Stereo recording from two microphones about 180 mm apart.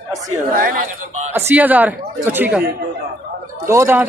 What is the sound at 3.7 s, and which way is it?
Speech, 15° right (ahead or behind).